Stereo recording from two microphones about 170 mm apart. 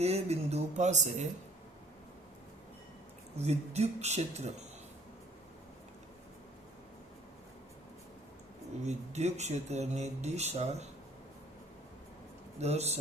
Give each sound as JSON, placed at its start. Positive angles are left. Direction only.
{"t": 0.0, "sound": "speech", "side_deg": -40}
{"t": 3.3, "sound": "speech", "side_deg": -40}
{"t": 8.8, "sound": "speech", "side_deg": -40}
{"t": 12.5, "sound": "speech", "side_deg": -40}